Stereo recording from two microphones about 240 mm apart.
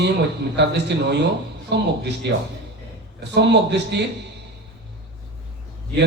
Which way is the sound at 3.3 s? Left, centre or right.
Right.